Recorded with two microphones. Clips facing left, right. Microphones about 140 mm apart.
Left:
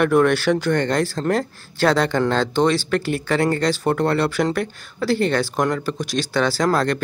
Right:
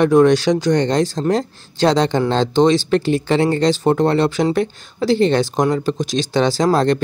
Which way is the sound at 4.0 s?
25° right (ahead or behind).